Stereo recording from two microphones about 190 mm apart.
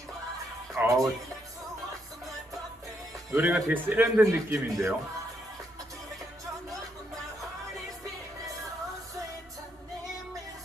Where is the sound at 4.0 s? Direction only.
15° right (ahead or behind).